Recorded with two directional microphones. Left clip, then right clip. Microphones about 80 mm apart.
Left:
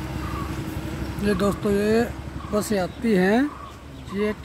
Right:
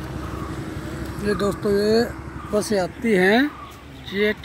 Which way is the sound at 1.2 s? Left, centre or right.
Centre.